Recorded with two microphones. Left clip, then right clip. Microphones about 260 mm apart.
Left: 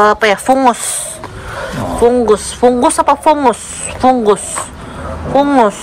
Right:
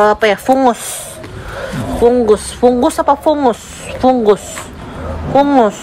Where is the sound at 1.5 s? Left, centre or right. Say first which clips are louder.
Left 2 dB; left.